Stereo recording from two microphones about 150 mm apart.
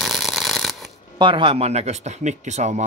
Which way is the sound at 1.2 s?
35° right (ahead or behind).